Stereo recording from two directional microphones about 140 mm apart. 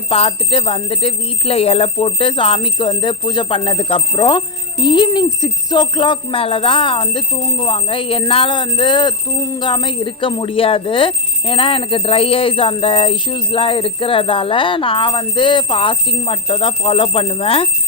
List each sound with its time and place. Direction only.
0.1 s speech: 40° left (ahead or behind)